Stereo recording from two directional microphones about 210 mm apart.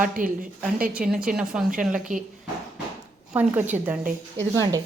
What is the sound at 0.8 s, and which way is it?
A woman's voice, 5° right (ahead or behind).